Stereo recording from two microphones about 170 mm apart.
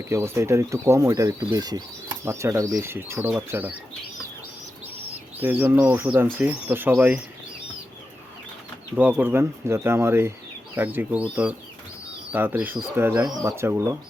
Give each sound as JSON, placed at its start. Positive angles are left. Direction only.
{"t": 0.0, "sound": "speech", "side_deg": -15}
{"t": 5.4, "sound": "speech", "side_deg": -10}
{"t": 9.0, "sound": "speech", "side_deg": -10}